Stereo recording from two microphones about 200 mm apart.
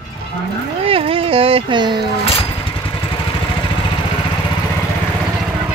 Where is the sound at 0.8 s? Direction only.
30° right (ahead or behind).